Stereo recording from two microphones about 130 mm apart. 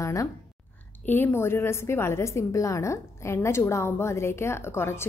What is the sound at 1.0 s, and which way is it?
A woman's voice, 15° left (ahead or behind).